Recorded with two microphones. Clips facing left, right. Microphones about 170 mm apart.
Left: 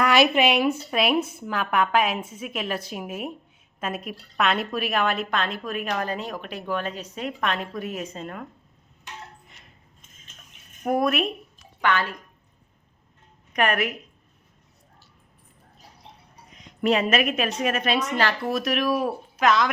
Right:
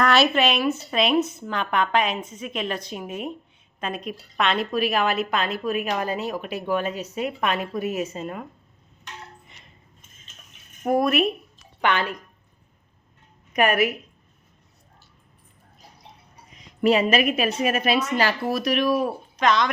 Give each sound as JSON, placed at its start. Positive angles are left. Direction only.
{"t": 0.0, "sound": "a woman's voice", "side_deg": 10}
{"t": 9.5, "sound": "a sound", "side_deg": 0}
{"t": 10.8, "sound": "speech", "side_deg": 0}
{"t": 11.8, "sound": "a woman's voice", "side_deg": -20}
{"t": 13.5, "sound": "a woman's voice", "side_deg": -5}
{"t": 16.5, "sound": "a woman's voice", "side_deg": 0}